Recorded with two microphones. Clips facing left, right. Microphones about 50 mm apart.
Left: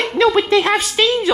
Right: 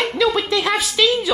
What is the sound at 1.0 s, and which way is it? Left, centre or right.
Speech, left.